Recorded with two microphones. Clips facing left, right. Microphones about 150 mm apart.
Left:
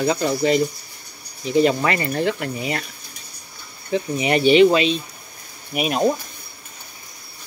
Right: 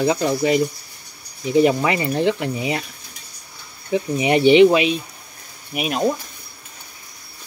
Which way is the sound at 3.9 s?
20° right (ahead or behind).